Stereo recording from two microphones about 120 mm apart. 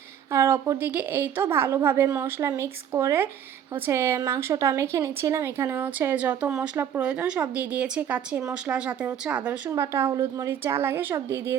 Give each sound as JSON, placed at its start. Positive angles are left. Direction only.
{"t": 0.3, "sound": "a woman's voice", "side_deg": -20}
{"t": 9.6, "sound": "a woman's voice", "side_deg": -25}